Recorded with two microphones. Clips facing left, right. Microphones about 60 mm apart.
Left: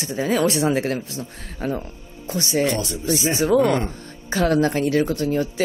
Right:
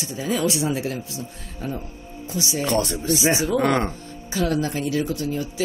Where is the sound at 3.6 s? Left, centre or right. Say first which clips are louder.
Left 2 dB; right.